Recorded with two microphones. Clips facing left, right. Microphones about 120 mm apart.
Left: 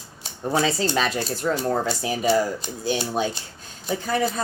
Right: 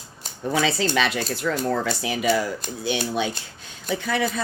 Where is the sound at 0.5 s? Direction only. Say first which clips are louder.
Even; 40° left (ahead or behind).